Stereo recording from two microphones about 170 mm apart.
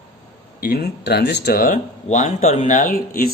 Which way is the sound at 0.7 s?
70° left (ahead or behind).